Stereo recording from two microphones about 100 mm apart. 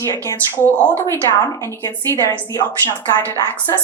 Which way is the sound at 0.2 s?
20° left (ahead or behind).